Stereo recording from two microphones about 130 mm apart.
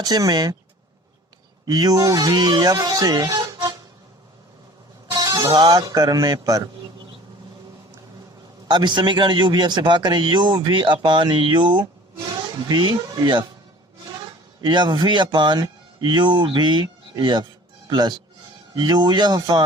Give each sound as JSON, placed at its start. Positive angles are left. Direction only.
{"t": 0.0, "sound": "speech", "side_deg": -30}
{"t": 1.6, "sound": "speech", "side_deg": -30}
{"t": 5.2, "sound": "speech", "side_deg": -30}
{"t": 8.6, "sound": "a man's voice", "side_deg": -35}
{"t": 14.6, "sound": "a man's voice", "side_deg": -35}